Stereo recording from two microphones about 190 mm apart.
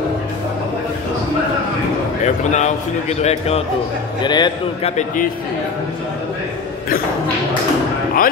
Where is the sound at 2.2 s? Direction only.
40° left (ahead or behind).